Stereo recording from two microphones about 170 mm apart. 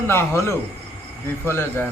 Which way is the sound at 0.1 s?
15° left (ahead or behind).